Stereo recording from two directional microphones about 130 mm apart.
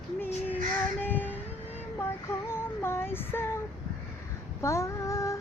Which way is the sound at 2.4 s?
20° left (ahead or behind).